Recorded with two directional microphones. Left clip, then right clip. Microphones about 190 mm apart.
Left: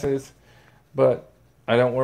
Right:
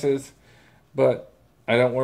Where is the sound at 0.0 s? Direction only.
10° left (ahead or behind).